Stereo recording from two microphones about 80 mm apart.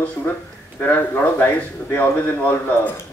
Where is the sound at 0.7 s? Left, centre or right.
Left.